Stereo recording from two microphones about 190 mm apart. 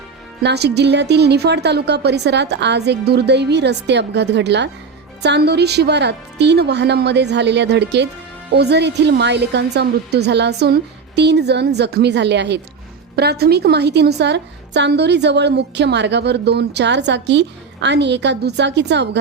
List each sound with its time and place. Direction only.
0.4 s a woman's voice: 60° right (ahead or behind)